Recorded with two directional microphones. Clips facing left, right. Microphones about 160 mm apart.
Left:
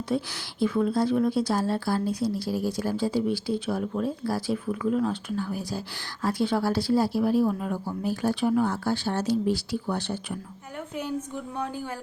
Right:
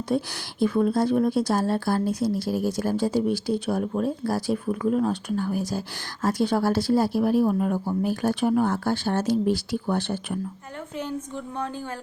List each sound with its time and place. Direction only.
0.1 s speech: 50° right (ahead or behind)